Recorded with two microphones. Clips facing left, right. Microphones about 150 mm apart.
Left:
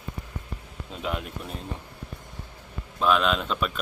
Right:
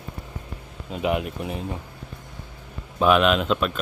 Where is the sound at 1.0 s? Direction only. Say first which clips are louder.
Right 8 dB; 70° right (ahead or behind).